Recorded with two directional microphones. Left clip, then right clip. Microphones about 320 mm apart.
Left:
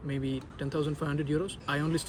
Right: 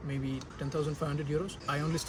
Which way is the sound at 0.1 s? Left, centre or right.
Centre.